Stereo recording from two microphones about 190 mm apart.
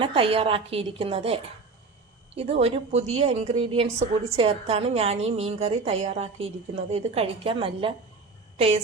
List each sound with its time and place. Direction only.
0.0 s a woman's voice: 30° right (ahead or behind)